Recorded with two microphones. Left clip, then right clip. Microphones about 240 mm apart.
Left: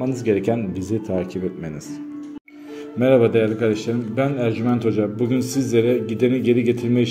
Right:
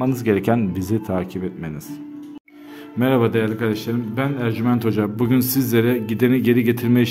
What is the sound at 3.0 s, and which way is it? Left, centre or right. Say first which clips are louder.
A man's voice: left 3 dB; centre.